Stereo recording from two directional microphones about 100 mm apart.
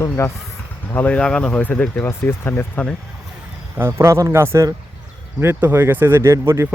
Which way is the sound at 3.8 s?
25° right (ahead or behind).